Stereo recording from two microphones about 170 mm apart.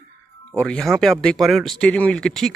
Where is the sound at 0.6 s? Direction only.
5° left (ahead or behind).